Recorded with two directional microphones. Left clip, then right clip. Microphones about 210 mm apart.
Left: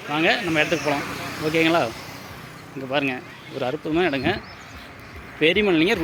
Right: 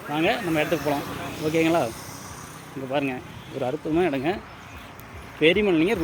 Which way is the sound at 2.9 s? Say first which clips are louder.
Left 3 dB; centre (ahead or behind).